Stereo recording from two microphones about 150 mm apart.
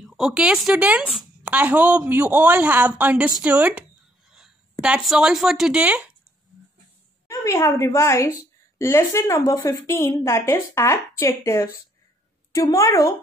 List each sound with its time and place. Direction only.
0.2 s a woman's voice: 5° right (ahead or behind)
4.8 s speech: 5° right (ahead or behind)
7.2 s a woman's voice: 20° left (ahead or behind)